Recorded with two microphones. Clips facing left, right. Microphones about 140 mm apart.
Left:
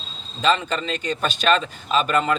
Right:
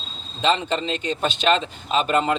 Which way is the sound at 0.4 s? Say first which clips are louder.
Even; 25° right (ahead or behind).